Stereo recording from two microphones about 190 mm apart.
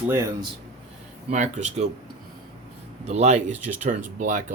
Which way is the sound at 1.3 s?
40° right (ahead or behind).